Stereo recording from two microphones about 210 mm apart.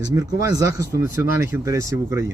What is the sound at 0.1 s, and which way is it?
Speech, 15° right (ahead or behind).